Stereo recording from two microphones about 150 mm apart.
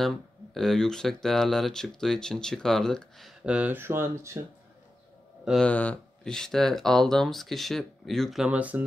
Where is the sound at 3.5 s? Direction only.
10° right (ahead or behind).